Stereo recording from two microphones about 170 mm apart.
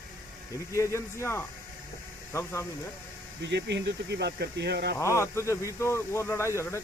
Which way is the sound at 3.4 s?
90° right.